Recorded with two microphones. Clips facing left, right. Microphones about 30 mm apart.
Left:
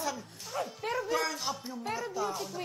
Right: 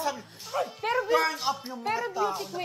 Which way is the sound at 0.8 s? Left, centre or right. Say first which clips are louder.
Right 7 dB; right.